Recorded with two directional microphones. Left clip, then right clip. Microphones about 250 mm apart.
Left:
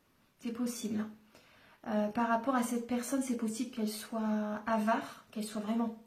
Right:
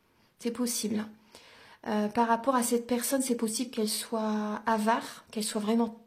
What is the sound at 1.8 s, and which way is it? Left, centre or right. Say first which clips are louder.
Speech: right 5 dB; right.